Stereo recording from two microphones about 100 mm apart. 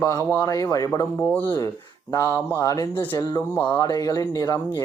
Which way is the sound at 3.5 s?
25° left (ahead or behind).